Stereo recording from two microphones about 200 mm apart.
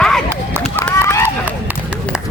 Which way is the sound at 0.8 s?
15° left (ahead or behind).